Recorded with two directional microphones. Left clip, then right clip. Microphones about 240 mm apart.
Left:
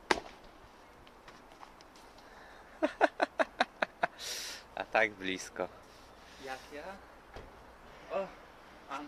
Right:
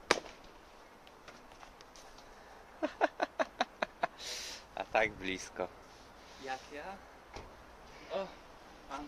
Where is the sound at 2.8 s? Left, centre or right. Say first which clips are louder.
Left 4 dB; left; by 5.7 s centre.